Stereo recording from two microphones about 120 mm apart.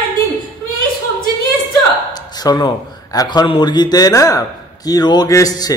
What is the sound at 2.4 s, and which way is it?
A man's voice, 35° left (ahead or behind).